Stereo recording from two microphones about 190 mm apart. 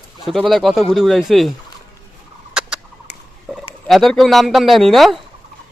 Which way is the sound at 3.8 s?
Centre (ahead or behind).